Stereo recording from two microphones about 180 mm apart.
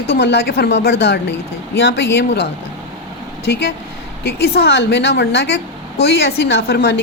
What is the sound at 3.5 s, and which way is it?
A woman's voice, 60° left (ahead or behind).